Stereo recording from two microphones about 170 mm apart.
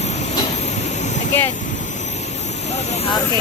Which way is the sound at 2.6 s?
40° left (ahead or behind).